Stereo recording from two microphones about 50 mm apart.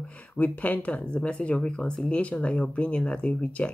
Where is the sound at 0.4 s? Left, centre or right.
Left.